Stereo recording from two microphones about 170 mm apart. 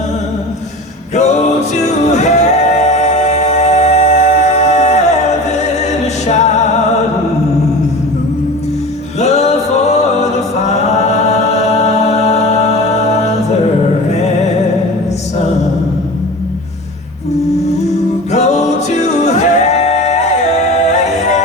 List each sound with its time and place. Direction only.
1.1 s music: 40° left (ahead or behind)
6.2 s music: 45° left (ahead or behind)
9.2 s music: 40° left (ahead or behind)
18.3 s music: 40° left (ahead or behind)